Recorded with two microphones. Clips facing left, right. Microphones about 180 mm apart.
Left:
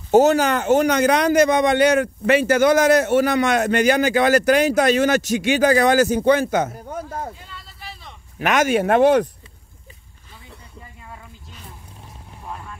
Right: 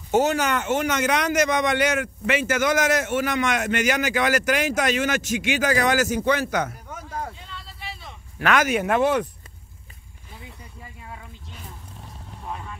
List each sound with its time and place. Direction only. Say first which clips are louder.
0.1 s a man's voice: left 6 dB; 35° left (ahead or behind)
7.3 s a sound: even; centre (ahead or behind)
8.4 s a man's voice: left 3 dB; 20° left (ahead or behind); by 9.3 s 40° left (ahead or behind)
12.4 s vehicle: even; centre (ahead or behind)